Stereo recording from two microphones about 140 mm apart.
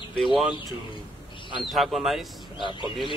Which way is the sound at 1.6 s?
Centre (ahead or behind).